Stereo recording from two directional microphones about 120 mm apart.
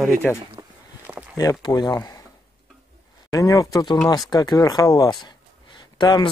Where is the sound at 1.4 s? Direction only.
30° left (ahead or behind).